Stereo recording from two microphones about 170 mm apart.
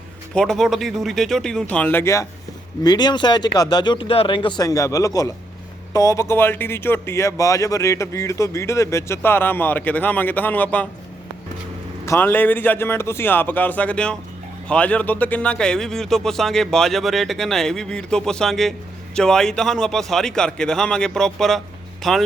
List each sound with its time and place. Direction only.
0.3 s speech: centre (ahead or behind)
12.0 s speech: 15° left (ahead or behind)